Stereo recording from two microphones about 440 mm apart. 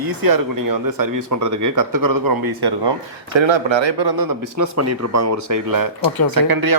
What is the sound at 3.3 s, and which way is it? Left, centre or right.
Speech, right.